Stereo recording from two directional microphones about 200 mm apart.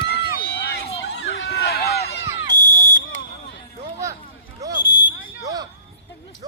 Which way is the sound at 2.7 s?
40° left (ahead or behind).